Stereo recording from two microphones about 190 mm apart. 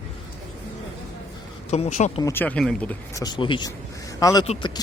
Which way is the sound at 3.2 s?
25° left (ahead or behind).